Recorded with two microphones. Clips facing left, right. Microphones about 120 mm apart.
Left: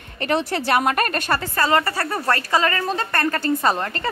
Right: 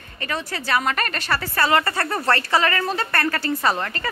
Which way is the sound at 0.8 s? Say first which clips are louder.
Left 4 dB; 50° left (ahead or behind).